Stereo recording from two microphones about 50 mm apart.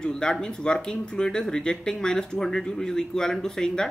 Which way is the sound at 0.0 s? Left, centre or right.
Centre.